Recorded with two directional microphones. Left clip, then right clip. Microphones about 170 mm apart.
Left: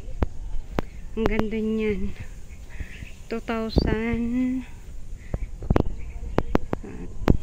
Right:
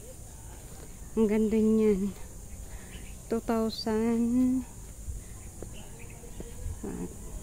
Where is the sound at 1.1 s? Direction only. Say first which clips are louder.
Left 1 dB; 20° right (ahead or behind).